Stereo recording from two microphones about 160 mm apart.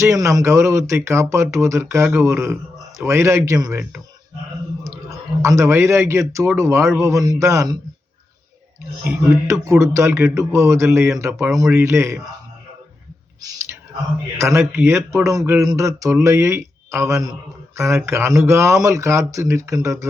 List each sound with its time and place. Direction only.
0.0 s speech: 20° right (ahead or behind)
9.0 s speech: 20° right (ahead or behind)
14.3 s speech: 15° right (ahead or behind)